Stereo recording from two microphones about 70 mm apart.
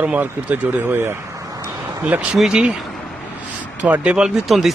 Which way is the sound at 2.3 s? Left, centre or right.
Centre.